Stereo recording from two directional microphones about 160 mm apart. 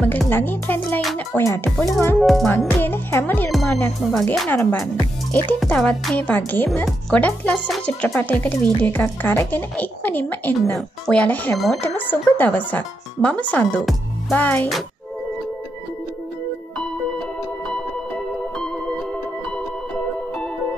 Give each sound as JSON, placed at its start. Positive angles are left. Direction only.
{"t": 0.0, "sound": "speech", "side_deg": 10}
{"t": 2.1, "sound": "speech", "side_deg": 0}
{"t": 2.8, "sound": "speech", "side_deg": 15}
{"t": 4.1, "sound": "speech", "side_deg": 5}